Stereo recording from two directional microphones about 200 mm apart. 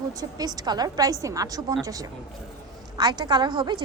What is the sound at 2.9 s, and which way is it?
Speech, 20° right (ahead or behind).